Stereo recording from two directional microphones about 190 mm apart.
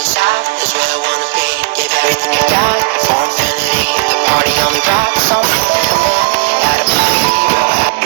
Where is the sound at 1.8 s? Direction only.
55° right (ahead or behind).